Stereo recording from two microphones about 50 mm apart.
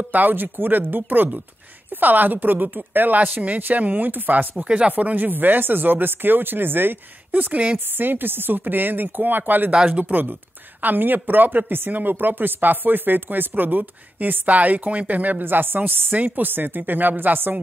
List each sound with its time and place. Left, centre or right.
0.1 s speech: right
4.6 s speech: right
4.9 s speech: right
9.7 s speech: right